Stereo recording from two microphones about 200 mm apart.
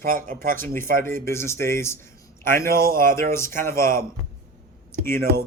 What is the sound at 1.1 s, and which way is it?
Speech, 10° left (ahead or behind).